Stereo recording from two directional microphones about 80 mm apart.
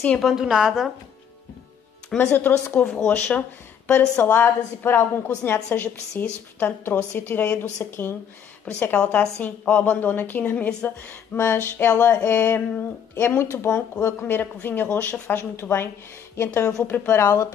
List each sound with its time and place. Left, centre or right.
0.2 s a woman's voice: centre
2.1 s speech: left
2.7 s speech: centre
3.3 s speech: left
17.2 s speech: left